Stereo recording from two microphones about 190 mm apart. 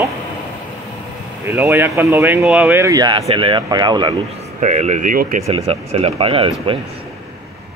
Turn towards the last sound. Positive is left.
turn(degrees=-30)  # may be behind; listen again after turning